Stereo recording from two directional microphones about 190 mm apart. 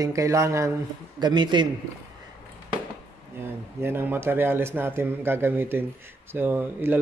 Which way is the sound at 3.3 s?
10° right (ahead or behind).